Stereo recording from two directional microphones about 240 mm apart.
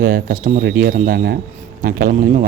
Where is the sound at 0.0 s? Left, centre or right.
Right.